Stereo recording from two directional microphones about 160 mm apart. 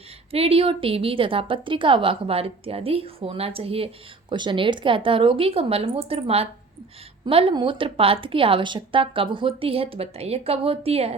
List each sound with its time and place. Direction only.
0.3 s a woman's voice: 40° right (ahead or behind)